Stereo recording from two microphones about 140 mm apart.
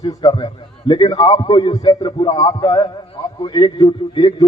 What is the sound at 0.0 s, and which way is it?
A man's voice, 25° left (ahead or behind).